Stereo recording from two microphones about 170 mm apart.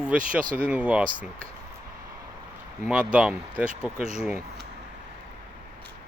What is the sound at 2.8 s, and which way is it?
Speech, 5° right (ahead or behind).